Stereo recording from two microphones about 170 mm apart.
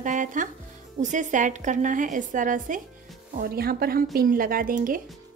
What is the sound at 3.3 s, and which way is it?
A woman's voice, 60° right (ahead or behind).